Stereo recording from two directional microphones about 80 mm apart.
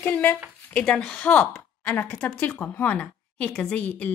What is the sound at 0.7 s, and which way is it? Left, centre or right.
A woman's voice, centre.